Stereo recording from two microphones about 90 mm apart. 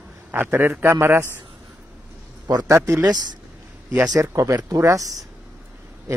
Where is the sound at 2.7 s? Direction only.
30° right (ahead or behind).